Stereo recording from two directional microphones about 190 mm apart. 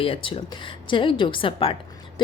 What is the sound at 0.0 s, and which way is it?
A woman's voice, 30° left (ahead or behind).